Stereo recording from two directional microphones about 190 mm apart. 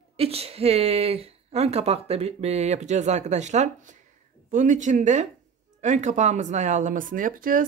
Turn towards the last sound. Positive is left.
turn(degrees=-45)  # may be behind; listen again after turning